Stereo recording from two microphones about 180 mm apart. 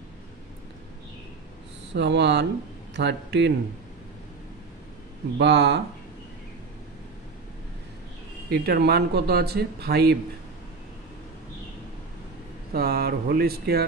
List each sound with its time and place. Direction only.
2.0 s a man's voice: 75° right (ahead or behind)
5.4 s a man's voice: 75° right (ahead or behind)
8.5 s speech: 60° right (ahead or behind)
12.7 s speech: 60° right (ahead or behind)